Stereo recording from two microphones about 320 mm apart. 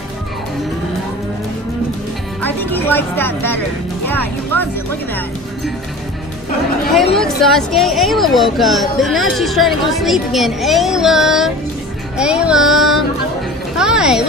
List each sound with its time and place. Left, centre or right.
2.4 s speech: centre
7.2 s speech: centre